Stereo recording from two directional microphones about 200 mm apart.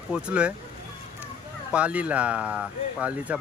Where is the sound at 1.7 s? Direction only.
5° right (ahead or behind).